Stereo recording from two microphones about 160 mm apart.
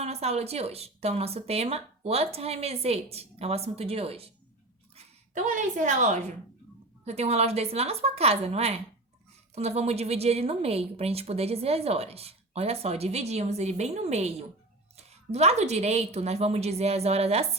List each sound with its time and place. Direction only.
0.0 s a woman's voice: 40° right (ahead or behind)
4.9 s a woman's voice: 50° right (ahead or behind)